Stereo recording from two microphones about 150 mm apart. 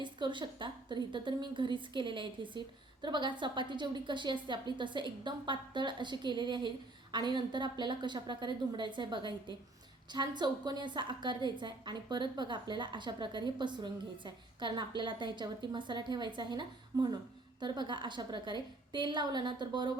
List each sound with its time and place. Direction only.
0.0 s a woman's voice: 30° right (ahead or behind)